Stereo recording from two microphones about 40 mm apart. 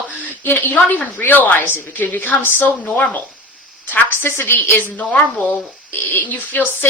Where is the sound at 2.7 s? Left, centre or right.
Left.